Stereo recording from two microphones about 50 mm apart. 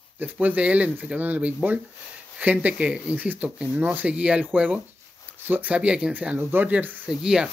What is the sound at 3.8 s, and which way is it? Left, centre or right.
Speech, right.